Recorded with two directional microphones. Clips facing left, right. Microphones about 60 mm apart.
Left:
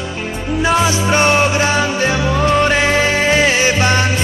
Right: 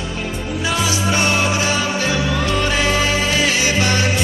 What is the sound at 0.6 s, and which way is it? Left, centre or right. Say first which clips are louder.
Music: left 6 dB; left.